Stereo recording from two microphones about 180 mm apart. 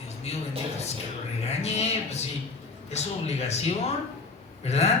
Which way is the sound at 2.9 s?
35° left (ahead or behind).